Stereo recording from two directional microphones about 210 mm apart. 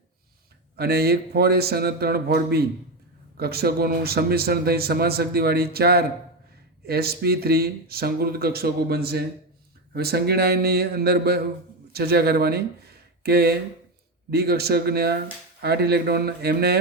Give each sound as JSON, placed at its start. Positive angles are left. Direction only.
{"t": 0.8, "sound": "speech", "side_deg": -50}